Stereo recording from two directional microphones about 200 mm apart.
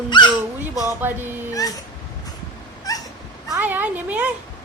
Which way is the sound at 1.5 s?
20° left (ahead or behind).